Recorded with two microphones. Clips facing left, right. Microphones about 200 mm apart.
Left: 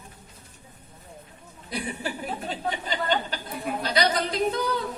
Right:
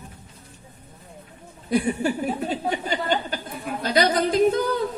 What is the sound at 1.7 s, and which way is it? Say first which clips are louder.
Yodeling: right 10 dB; 45° right (ahead or behind).